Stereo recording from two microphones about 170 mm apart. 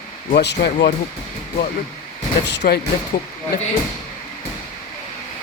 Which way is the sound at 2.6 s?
60° left (ahead or behind).